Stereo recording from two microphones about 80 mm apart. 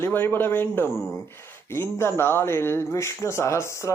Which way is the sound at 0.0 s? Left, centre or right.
Left.